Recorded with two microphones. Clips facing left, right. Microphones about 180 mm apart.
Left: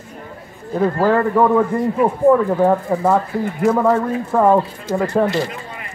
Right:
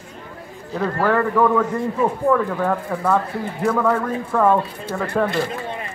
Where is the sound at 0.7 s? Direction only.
20° left (ahead or behind).